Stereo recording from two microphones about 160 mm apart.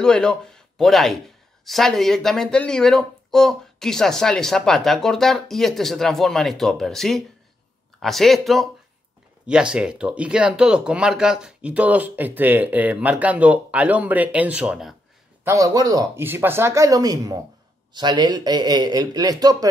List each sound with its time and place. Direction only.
0.0 s speech: 5° left (ahead or behind)
15.4 s speech: 20° right (ahead or behind)